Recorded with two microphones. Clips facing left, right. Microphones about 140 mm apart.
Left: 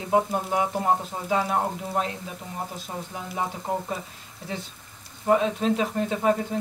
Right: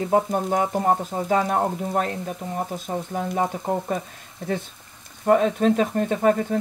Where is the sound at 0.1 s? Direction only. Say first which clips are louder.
Right 1 dB; 45° right (ahead or behind).